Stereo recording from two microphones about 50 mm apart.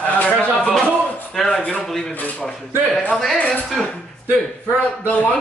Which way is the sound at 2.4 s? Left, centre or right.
Centre.